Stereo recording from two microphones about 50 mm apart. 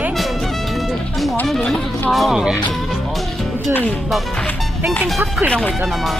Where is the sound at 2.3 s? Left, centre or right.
Centre.